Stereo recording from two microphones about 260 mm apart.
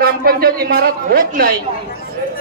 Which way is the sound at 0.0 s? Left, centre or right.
Right.